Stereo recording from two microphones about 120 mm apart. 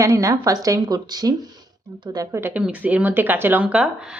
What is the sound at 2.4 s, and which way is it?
Speech, 15° right (ahead or behind).